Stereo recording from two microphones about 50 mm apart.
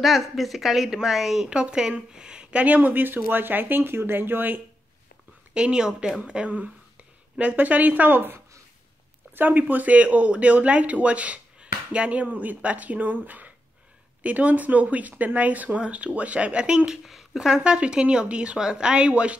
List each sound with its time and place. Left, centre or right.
0.0 s a woman's voice: centre
1.5 s speech: centre
2.6 s speech: right
5.5 s speech: centre
6.2 s speech: right; by 17.6 s centre
17.6 s speech: right